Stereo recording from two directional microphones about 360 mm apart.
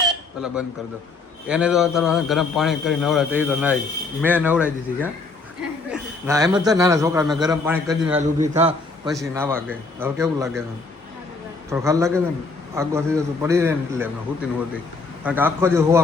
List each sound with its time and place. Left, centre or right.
1.5 s a man's voice: centre
8.0 s a man's voice: centre
9.0 s a man's voice: centre
11.7 s a man's voice: centre
15.2 s a man's voice: centre